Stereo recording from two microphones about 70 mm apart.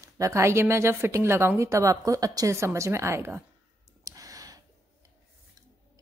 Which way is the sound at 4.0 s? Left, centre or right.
Right.